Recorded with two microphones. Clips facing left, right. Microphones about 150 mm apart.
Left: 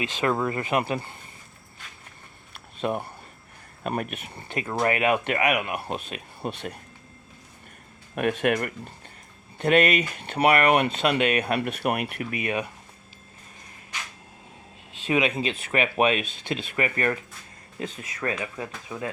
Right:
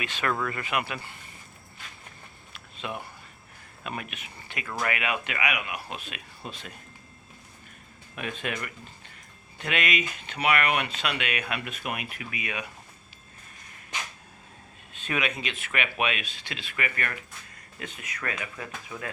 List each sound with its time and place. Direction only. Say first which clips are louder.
0.0 s speech: left 5 dB; 25° left (ahead or behind)
2.8 s speech: left 8 dB; 45° left (ahead or behind)
4.6 s speech: left 7 dB; 30° left (ahead or behind)
6.4 s speech: left 9 dB; 65° left (ahead or behind)
8.1 s speech: left 10 dB; 60° left (ahead or behind)
10.5 s speech: left 5 dB; 40° left (ahead or behind)
11.8 s speech: left 8 dB; 65° left (ahead or behind)
12.3 s speech: left 7 dB; 45° left (ahead or behind)
15.0 s speech: left 7 dB; 25° left (ahead or behind)